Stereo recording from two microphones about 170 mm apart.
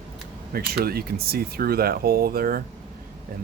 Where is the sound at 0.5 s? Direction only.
65° right (ahead or behind).